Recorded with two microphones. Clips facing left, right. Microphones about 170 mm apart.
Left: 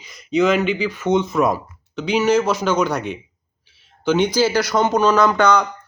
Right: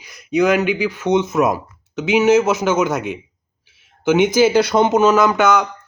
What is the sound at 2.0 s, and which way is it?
Speech, 20° right (ahead or behind).